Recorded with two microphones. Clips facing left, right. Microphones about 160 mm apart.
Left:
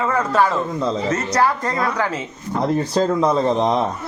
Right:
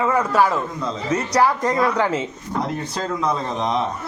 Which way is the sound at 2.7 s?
35° left (ahead or behind).